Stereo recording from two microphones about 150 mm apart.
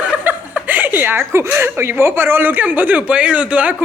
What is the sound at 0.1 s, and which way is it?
Speech, 10° right (ahead or behind).